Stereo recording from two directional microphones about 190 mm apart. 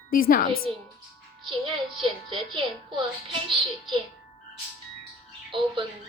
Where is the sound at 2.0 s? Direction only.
25° right (ahead or behind).